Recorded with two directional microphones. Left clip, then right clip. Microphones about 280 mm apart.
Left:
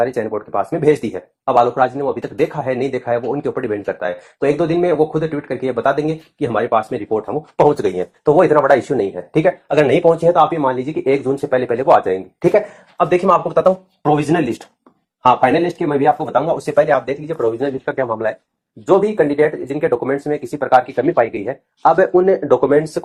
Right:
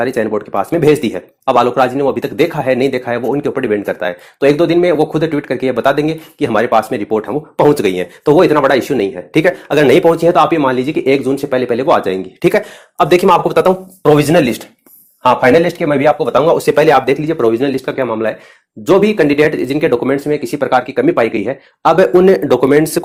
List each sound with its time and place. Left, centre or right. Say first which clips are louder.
0.0 s speech: right 3 dB; right